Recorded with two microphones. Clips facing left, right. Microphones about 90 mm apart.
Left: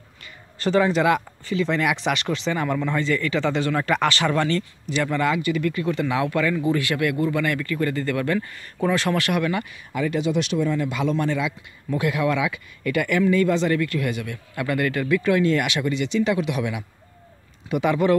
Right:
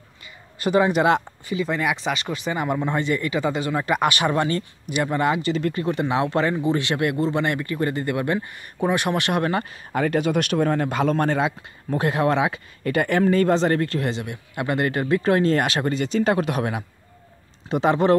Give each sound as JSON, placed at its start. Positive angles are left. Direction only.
{"t": 0.6, "sound": "speech", "side_deg": -15}
{"t": 1.4, "sound": "speech", "side_deg": -10}
{"t": 9.4, "sound": "speech", "side_deg": -35}
{"t": 10.0, "sound": "speech", "side_deg": -55}
{"t": 17.6, "sound": "speech", "side_deg": -30}